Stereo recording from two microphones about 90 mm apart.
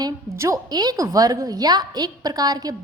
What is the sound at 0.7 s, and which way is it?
A woman's voice, 50° right (ahead or behind).